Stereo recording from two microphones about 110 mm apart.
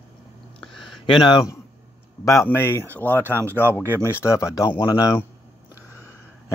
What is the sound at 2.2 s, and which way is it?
Speech, 25° left (ahead or behind).